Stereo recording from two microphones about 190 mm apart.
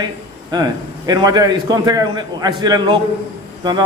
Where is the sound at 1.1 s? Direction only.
20° right (ahead or behind).